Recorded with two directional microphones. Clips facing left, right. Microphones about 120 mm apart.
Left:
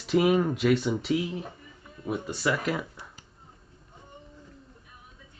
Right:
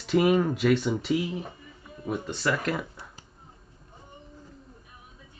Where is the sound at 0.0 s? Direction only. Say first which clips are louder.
Right 1 dB; centre (ahead or behind).